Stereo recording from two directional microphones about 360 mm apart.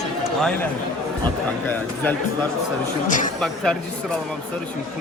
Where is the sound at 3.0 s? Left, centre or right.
Left.